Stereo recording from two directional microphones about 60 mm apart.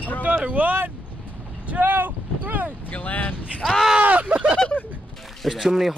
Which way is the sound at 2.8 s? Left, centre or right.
Left.